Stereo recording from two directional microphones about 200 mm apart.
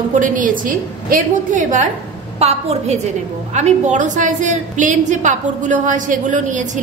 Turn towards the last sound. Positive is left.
turn(degrees=-40)  # may be behind; listen again after turning